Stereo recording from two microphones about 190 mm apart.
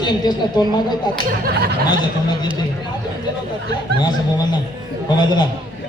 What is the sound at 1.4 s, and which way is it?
Speech, 55° right (ahead or behind).